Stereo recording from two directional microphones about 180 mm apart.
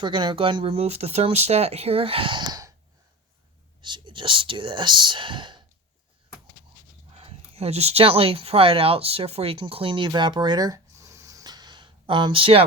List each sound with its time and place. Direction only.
0.0 s speech: 25° right (ahead or behind)
3.8 s speech: 25° right (ahead or behind)
7.1 s speech: 35° right (ahead or behind)